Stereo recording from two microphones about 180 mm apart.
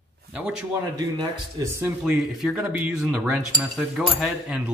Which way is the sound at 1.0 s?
15° right (ahead or behind).